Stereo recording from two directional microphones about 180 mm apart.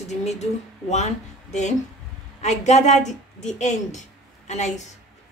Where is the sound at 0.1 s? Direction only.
40° left (ahead or behind).